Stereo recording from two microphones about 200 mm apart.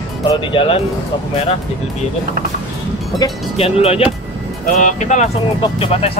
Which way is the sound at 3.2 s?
30° left (ahead or behind).